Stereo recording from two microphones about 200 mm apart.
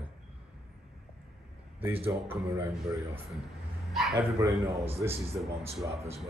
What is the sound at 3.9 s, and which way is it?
Bow-wow, centre (ahead or behind).